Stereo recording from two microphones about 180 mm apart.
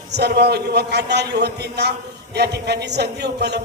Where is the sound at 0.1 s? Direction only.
65° right (ahead or behind).